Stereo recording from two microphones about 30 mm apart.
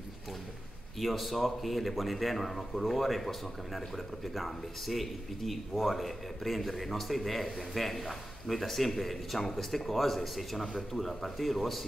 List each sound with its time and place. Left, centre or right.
0.9 s a man's voice: centre